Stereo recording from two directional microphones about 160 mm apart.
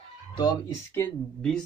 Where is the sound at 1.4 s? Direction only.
5° left (ahead or behind).